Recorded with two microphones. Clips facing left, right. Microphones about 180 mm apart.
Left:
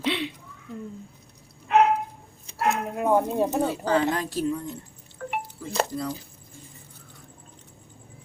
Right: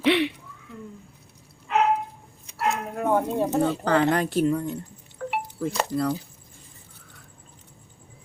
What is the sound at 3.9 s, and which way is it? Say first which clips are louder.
Speech: right 2 dB; 65° right (ahead or behind).